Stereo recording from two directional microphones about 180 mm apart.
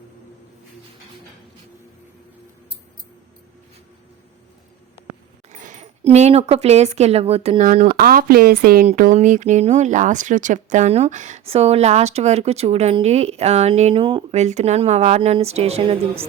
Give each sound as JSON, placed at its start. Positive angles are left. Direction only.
{"t": 5.5, "sound": "speech", "side_deg": -45}
{"t": 8.9, "sound": "speech", "side_deg": -40}